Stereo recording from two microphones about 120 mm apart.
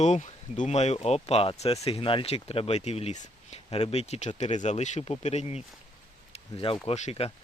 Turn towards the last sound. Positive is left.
turn(degrees=65)  # may be behind; listen again after turning